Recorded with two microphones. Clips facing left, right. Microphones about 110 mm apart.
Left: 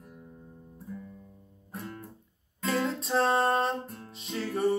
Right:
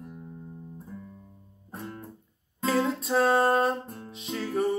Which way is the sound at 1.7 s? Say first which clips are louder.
Right 1 dB; 25° right (ahead or behind).